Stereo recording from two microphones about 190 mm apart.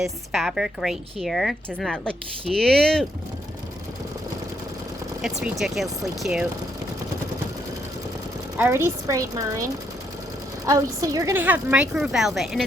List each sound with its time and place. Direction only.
0.0 s a woman's voice: centre (ahead or behind)
5.2 s a woman's voice: centre (ahead or behind)
8.5 s a woman's voice: 10° right (ahead or behind)
10.7 s a woman's voice: 20° right (ahead or behind); by 12.6 s centre (ahead or behind)